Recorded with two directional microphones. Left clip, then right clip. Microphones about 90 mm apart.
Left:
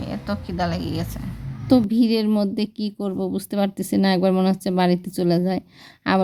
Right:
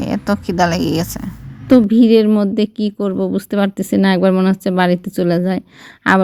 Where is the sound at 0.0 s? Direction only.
90° right.